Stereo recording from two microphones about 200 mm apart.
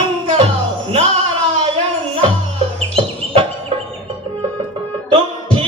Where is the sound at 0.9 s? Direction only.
30° right (ahead or behind).